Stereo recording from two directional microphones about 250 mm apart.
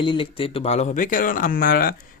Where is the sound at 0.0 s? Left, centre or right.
Left.